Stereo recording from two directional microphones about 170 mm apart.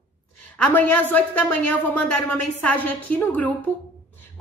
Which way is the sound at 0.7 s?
10° left (ahead or behind).